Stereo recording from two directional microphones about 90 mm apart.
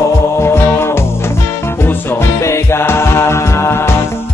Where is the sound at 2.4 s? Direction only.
30° left (ahead or behind).